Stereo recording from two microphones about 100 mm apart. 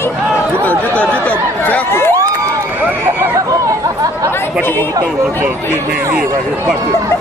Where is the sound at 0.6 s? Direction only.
15° left (ahead or behind).